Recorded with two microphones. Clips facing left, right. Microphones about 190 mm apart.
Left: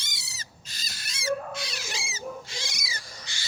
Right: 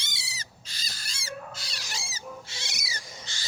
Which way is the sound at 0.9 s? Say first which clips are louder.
Left 1 dB; 30° right (ahead or behind).